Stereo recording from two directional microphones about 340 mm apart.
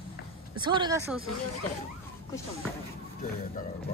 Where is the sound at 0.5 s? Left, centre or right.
Centre.